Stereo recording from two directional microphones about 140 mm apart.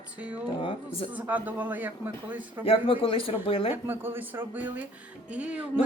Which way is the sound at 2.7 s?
35° left (ahead or behind).